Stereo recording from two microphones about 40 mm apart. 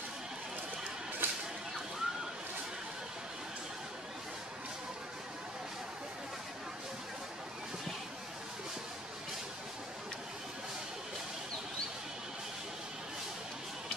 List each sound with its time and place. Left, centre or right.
1.2 s whip: right